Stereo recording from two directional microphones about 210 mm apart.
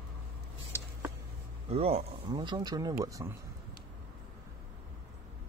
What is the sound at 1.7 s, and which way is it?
Speech, 30° right (ahead or behind).